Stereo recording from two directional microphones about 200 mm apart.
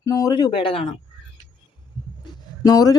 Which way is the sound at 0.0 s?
15° left (ahead or behind).